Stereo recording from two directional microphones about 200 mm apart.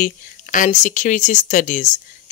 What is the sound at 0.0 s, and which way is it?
Speech, 40° left (ahead or behind).